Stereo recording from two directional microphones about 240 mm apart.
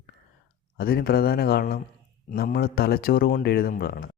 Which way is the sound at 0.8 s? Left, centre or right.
Left.